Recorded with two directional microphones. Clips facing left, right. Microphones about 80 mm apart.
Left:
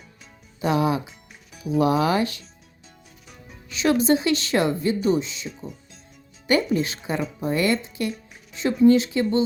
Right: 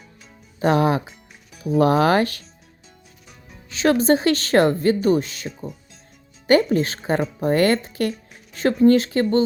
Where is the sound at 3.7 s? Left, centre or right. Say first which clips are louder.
Right 2 dB; right.